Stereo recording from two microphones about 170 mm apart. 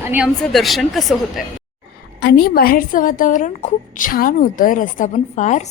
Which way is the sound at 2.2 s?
70° left (ahead or behind).